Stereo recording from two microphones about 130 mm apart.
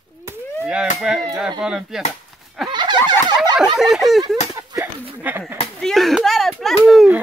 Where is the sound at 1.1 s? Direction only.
5° right (ahead or behind).